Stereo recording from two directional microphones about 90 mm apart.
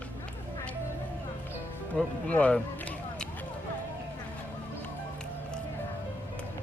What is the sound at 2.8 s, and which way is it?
Run, 15° left (ahead or behind).